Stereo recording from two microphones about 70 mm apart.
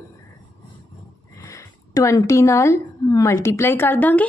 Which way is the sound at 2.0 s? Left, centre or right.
Left.